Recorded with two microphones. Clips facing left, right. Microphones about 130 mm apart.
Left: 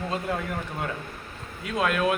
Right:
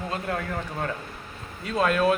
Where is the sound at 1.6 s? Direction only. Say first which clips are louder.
Right 2 dB; 5° left (ahead or behind).